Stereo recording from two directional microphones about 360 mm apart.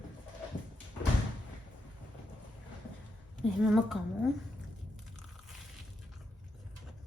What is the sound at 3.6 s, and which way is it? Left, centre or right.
Speech, centre.